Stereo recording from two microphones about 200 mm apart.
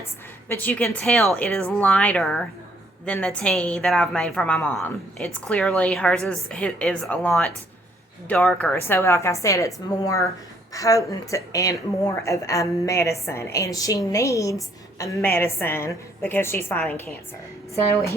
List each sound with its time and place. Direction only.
0.4 s a woman's voice: 10° left (ahead or behind)